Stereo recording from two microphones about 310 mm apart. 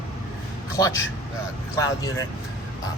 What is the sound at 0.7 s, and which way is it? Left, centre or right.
A man's voice, centre.